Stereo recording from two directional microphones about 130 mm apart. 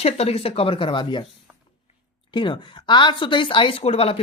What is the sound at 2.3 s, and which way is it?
Speech, 40° left (ahead or behind).